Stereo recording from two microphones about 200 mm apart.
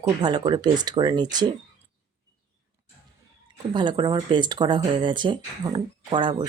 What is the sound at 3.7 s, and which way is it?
Speech, 20° right (ahead or behind).